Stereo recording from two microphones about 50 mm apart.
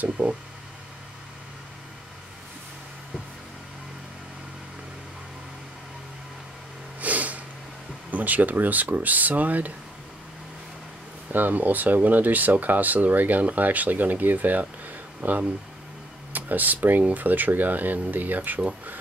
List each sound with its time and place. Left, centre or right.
0.0 s speech: right
7.0 s snort: right
8.1 s speech: right
11.3 s speech: right